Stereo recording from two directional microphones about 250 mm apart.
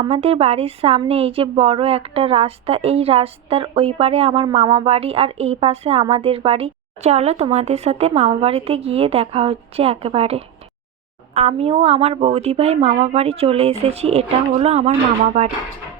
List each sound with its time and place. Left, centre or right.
0.0 s speech: right